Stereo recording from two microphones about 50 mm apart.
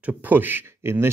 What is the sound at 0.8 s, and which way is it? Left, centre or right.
Speech, right.